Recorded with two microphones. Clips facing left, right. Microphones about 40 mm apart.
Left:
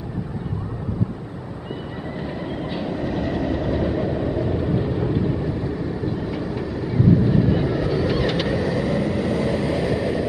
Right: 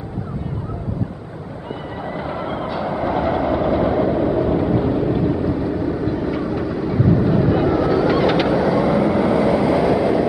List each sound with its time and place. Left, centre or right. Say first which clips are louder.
2.1 s vehicle: right 4 dB; centre